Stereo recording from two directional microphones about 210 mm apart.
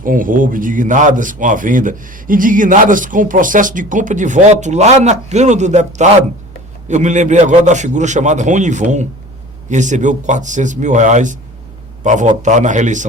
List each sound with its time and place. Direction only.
0.0 s a man's voice: 40° right (ahead or behind)